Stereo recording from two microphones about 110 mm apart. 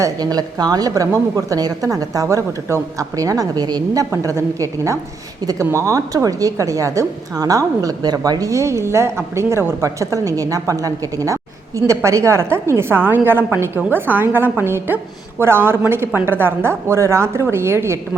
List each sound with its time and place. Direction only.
0.0 s a woman's voice: 35° right (ahead or behind)